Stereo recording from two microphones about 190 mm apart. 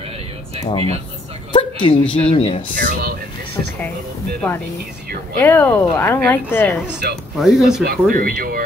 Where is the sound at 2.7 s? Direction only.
45° right (ahead or behind).